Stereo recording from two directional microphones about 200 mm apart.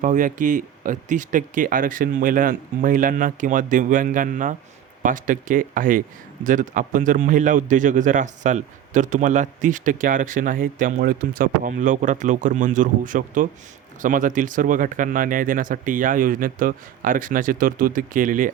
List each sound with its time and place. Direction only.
0.0 s a man's voice: 40° right (ahead or behind)